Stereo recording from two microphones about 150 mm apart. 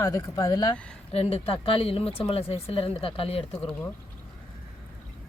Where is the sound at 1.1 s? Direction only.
40° left (ahead or behind).